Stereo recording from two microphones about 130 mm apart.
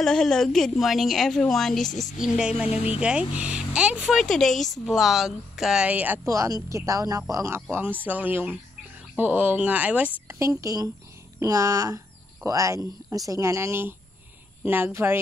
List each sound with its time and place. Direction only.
0.0 s a woman's voice: 5° left (ahead or behind); by 6.2 s 10° right (ahead or behind)
6.2 s speech: 25° right (ahead or behind)
10.4 s speech: 25° right (ahead or behind)